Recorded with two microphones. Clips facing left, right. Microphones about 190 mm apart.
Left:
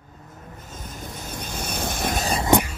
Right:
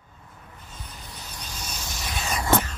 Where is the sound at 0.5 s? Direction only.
45° left (ahead or behind).